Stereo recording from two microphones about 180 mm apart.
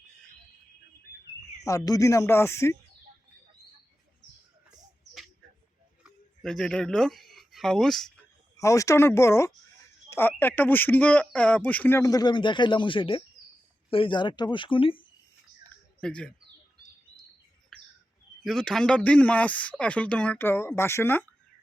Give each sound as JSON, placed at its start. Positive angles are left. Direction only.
{"t": 1.6, "sound": "speech", "side_deg": 20}
{"t": 6.0, "sound": "speech", "side_deg": 5}
{"t": 8.5, "sound": "speech", "side_deg": 20}
{"t": 16.0, "sound": "speech", "side_deg": 5}
{"t": 17.7, "sound": "bird", "side_deg": 5}
{"t": 18.4, "sound": "speech", "side_deg": 0}